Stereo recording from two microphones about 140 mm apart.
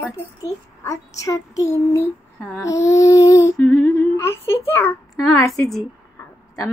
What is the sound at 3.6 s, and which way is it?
Humming, 10° left (ahead or behind).